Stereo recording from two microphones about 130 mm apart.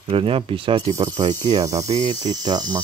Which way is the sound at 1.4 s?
30° right (ahead or behind).